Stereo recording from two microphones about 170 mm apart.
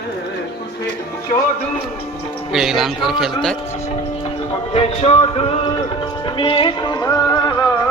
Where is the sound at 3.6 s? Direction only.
40° left (ahead or behind).